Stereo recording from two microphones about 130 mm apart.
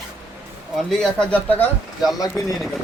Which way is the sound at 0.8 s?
5° left (ahead or behind).